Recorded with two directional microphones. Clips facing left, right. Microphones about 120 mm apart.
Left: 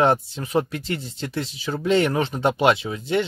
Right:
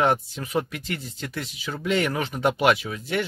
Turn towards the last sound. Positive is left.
turn(degrees=25)  # may be behind; listen again after turning